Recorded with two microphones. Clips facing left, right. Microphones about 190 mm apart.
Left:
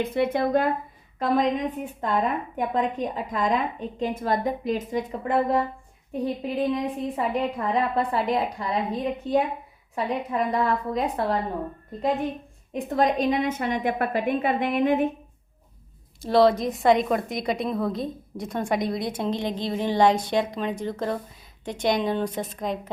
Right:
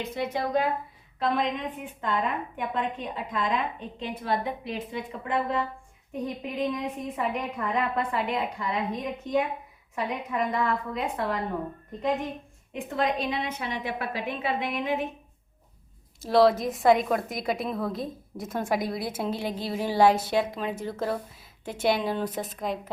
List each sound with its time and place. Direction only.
0.0 s a woman's voice: 55° left (ahead or behind)
1.2 s a woman's voice: 40° left (ahead or behind)
12.7 s a woman's voice: 45° left (ahead or behind)
16.2 s a woman's voice: centre (ahead or behind)